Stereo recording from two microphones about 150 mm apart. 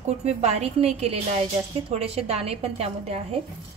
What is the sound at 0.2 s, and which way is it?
A woman's voice, 45° right (ahead or behind).